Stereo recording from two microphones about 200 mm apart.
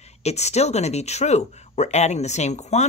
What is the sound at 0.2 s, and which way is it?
Speech, 35° left (ahead or behind).